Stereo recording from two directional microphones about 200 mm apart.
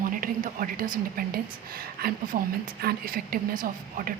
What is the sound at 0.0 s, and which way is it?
A woman's voice, 45° right (ahead or behind).